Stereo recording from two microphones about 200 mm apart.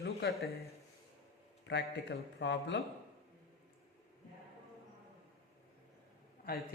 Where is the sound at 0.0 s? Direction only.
50° left (ahead or behind).